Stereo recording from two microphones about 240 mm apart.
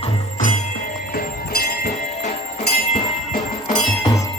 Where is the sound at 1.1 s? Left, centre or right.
Left.